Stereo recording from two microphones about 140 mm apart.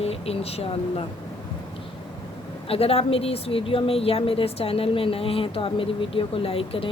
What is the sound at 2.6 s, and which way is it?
A woman's voice, 45° left (ahead or behind).